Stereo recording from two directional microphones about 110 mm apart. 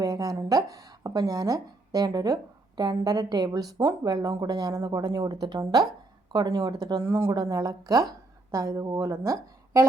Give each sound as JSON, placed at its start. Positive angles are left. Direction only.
{"t": 0.0, "sound": "speech", "side_deg": -30}